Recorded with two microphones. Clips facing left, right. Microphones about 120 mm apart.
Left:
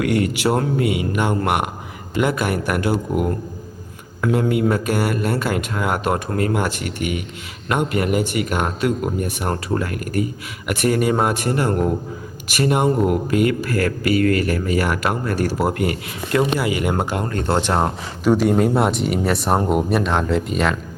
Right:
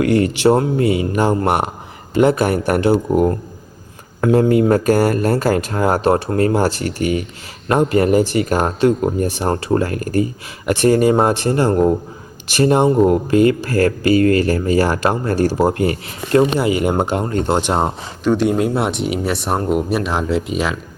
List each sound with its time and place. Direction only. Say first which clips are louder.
0.0 s speech: right 5 dB; 30° right (ahead or behind)
18.2 s speech: even; 5° left (ahead or behind)